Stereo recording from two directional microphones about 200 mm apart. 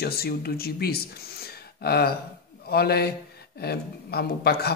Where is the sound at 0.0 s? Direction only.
50° left (ahead or behind).